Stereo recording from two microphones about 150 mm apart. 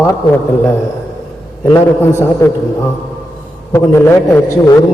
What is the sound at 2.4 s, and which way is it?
Speech, 20° left (ahead or behind).